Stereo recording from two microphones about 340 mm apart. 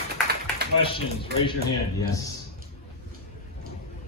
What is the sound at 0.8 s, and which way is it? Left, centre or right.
Speech, centre.